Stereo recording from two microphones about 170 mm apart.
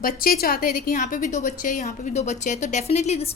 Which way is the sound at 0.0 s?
60° left (ahead or behind).